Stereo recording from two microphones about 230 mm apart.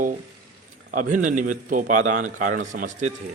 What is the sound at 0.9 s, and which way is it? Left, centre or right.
A man's voice, right.